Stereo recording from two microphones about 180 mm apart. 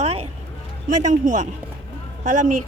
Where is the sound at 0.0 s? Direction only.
35° right (ahead or behind).